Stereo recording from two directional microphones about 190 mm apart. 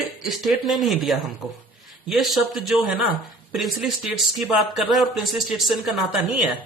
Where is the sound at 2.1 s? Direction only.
Centre (ahead or behind).